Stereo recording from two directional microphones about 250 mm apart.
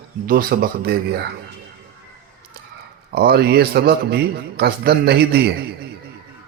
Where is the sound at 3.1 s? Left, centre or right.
Right.